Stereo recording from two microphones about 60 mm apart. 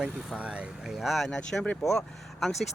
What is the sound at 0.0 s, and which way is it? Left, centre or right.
Speech, centre.